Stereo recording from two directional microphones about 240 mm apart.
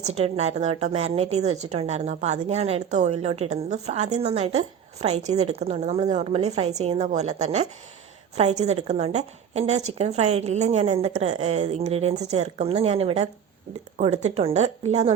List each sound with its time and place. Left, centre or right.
0.1 s a woman's voice: right